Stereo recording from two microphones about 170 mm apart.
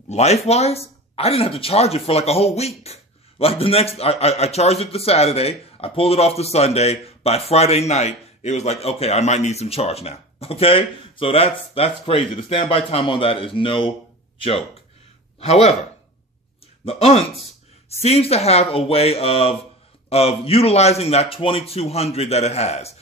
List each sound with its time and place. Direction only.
0.1 s speech: 40° left (ahead or behind)
15.4 s speech: 40° left (ahead or behind)
16.8 s speech: 35° left (ahead or behind)